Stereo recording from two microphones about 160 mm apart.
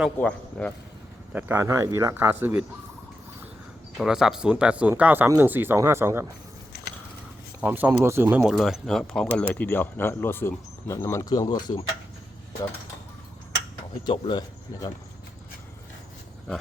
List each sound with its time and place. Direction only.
0.2 s speech: 5° left (ahead or behind)
1.3 s speech: 15° right (ahead or behind)
3.9 s speech: 5° right (ahead or behind)
6.7 s a sound: 70° left (ahead or behind)
7.6 s speech: 10° right (ahead or behind)
8.4 s speech: centre (ahead or behind); by 11.7 s 25° left (ahead or behind)
14.0 s speech: 30° left (ahead or behind)